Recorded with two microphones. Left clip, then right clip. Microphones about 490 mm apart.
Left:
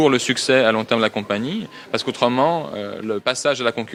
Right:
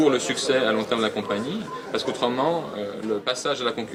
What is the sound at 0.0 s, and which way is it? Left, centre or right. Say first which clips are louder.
Speech: left 4 dB; left.